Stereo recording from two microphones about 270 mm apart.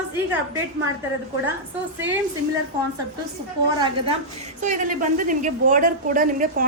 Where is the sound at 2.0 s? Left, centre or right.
Right.